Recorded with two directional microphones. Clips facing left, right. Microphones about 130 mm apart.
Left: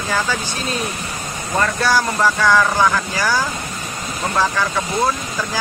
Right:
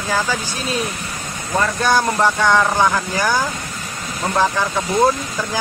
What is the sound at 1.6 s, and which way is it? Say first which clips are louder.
Speech: right 1 dB; 20° right (ahead or behind).